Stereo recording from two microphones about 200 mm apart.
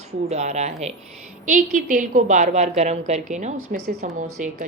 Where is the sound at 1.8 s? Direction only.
40° right (ahead or behind).